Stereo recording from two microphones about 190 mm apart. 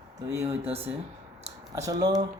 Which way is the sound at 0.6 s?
30° right (ahead or behind).